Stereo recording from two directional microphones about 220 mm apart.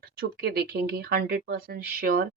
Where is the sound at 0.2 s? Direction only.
45° right (ahead or behind).